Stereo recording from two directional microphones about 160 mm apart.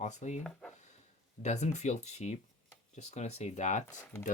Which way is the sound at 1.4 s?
45° left (ahead or behind).